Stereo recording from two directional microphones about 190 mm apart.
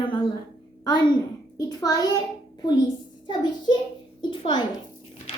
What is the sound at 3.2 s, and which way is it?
A child's voice, 25° left (ahead or behind).